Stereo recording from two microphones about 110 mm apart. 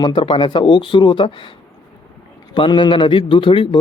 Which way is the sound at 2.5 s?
45° left (ahead or behind).